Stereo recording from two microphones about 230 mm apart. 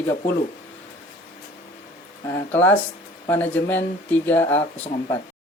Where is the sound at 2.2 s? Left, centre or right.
Centre.